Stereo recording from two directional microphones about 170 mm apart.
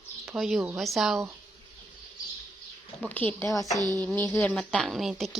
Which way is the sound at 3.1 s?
10° left (ahead or behind).